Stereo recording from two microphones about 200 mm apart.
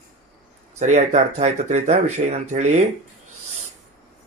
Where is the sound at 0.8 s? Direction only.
35° right (ahead or behind).